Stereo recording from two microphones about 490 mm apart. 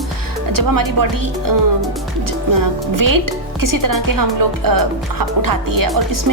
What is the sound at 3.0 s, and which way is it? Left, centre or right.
Speech, right.